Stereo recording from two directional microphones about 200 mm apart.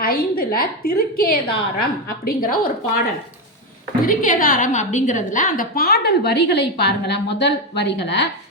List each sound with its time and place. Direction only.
0.0 s a woman's voice: 50° left (ahead or behind)
4.0 s a woman's voice: 40° left (ahead or behind); by 8.2 s 60° left (ahead or behind)